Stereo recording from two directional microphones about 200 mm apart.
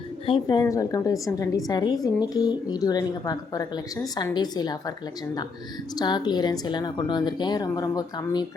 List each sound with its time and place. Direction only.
0.3 s a woman's voice: 25° left (ahead or behind)